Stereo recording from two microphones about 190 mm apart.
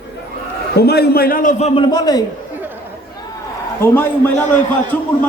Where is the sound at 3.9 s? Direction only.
10° left (ahead or behind).